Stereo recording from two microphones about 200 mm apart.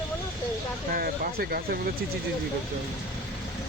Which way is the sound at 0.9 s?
50° right (ahead or behind).